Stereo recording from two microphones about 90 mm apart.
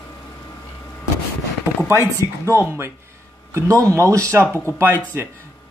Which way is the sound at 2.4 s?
30° right (ahead or behind).